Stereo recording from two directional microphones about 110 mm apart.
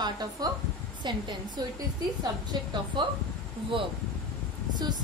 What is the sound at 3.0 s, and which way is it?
Speech, 45° right (ahead or behind).